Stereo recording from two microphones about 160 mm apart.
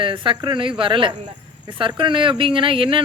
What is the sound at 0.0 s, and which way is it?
A woman's voice, 30° right (ahead or behind).